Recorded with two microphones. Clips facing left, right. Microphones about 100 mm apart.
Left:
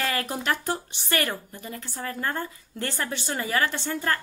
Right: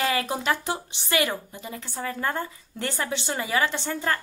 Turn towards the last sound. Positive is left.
turn(degrees=-20)  # may be behind; listen again after turning